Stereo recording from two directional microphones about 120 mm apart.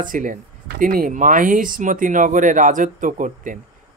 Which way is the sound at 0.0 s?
90° right.